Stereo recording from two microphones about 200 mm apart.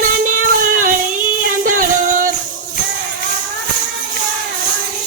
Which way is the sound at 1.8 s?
40° right (ahead or behind).